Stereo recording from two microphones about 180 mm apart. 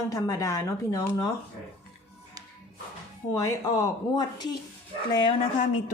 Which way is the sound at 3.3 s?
20° left (ahead or behind).